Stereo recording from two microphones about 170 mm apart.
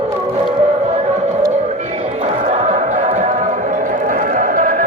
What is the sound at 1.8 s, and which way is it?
Music, 40° right (ahead or behind).